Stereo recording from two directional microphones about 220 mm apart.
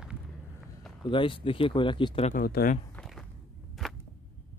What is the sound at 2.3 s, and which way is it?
Speech, 40° left (ahead or behind).